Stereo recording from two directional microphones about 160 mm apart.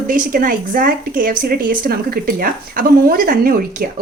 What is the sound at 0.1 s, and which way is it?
Speech, 60° right (ahead or behind).